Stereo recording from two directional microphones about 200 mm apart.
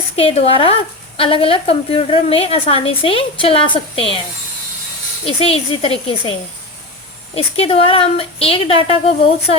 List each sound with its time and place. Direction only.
0.2 s a woman's voice: 30° left (ahead or behind)
5.2 s a woman's voice: 30° left (ahead or behind)
7.3 s a woman's voice: 30° left (ahead or behind)